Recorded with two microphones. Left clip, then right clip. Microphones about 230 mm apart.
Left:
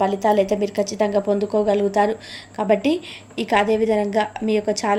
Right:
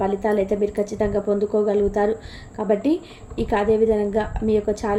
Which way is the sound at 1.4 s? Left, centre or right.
Left.